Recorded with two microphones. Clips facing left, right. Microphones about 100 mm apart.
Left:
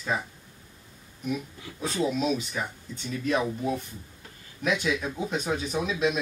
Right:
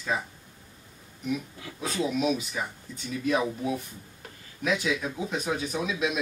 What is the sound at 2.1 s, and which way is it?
Speech, 5° right (ahead or behind).